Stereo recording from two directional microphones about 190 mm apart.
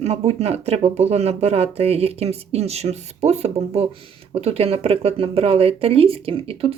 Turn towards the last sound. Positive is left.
turn(degrees=-30)  # may be behind; listen again after turning